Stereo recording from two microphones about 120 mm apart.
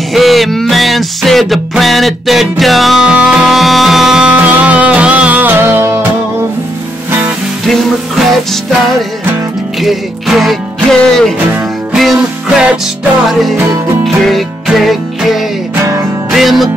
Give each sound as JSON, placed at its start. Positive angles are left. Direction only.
{"t": 0.1, "sound": "music", "side_deg": 0}
{"t": 7.1, "sound": "music", "side_deg": -15}
{"t": 9.8, "sound": "music", "side_deg": 0}